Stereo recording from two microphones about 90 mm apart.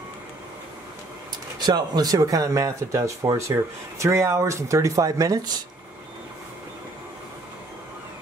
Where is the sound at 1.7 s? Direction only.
45° right (ahead or behind).